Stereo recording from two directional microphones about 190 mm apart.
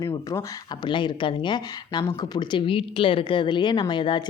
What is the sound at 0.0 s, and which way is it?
Speech, 15° left (ahead or behind).